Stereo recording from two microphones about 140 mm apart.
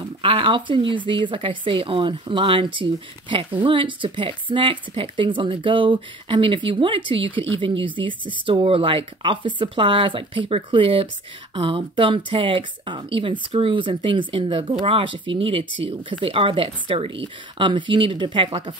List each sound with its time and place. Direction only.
0.2 s speech: 40° right (ahead or behind)